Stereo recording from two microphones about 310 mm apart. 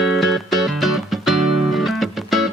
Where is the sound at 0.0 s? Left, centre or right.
Centre.